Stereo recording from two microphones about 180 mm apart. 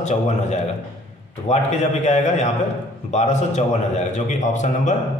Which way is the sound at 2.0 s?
40° left (ahead or behind).